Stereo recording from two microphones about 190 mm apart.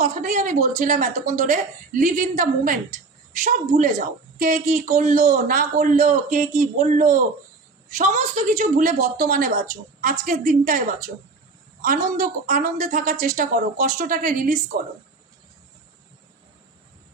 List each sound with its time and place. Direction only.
0.0 s a man's voice: 40° right (ahead or behind)
12.2 s a woman's voice: 45° right (ahead or behind)